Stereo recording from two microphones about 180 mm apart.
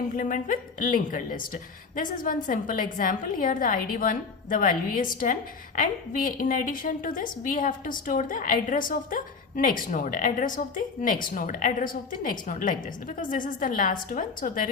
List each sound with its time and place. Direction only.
0.2 s a woman's voice: 45° left (ahead or behind)